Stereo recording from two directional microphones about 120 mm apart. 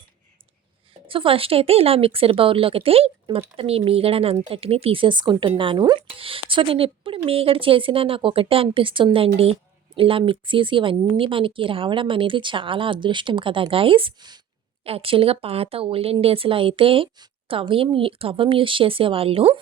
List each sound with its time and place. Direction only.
1.0 s speech: 50° right (ahead or behind)
6.1 s speech: 50° right (ahead or behind)
14.8 s speech: 50° right (ahead or behind)